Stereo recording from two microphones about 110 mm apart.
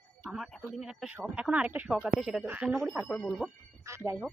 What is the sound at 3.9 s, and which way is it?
Speech, 25° right (ahead or behind).